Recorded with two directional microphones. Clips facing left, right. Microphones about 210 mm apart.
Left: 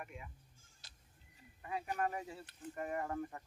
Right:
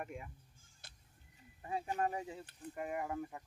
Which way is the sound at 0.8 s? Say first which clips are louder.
Right 5 dB; 55° right (ahead or behind).